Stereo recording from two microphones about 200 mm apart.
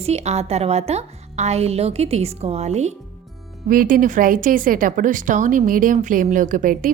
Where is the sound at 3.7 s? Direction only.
45° right (ahead or behind).